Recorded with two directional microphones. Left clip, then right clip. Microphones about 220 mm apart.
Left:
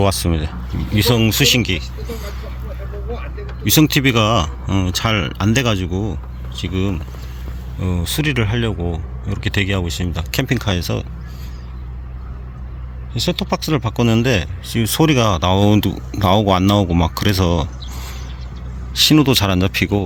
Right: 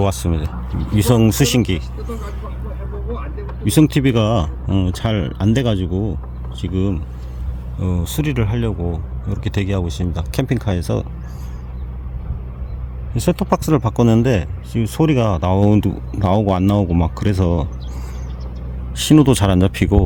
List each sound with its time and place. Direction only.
0.0 s speech: centre (ahead or behind)
0.9 s speech: 25° right (ahead or behind)
3.6 s speech: 15° right (ahead or behind)
13.1 s speech: 35° right (ahead or behind); by 14.5 s 15° right (ahead or behind)
14.7 s speech: 5° right (ahead or behind)
19.0 s speech: 20° right (ahead or behind)